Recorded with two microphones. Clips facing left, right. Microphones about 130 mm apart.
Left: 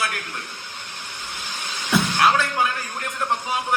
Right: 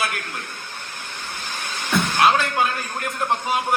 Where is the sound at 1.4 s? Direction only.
50° right (ahead or behind).